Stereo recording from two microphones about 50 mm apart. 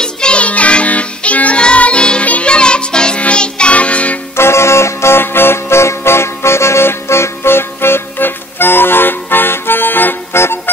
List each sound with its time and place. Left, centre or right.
0.0 s music: centre
4.4 s music: left
10.3 s music: left